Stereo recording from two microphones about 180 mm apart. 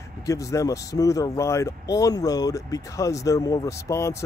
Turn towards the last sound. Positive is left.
turn(degrees=15)  # may be behind; listen again after turning